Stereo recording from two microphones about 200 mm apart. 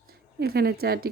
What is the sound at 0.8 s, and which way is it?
Speech, 50° right (ahead or behind).